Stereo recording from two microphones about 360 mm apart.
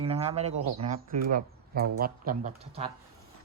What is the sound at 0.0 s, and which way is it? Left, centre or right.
A man's voice, centre.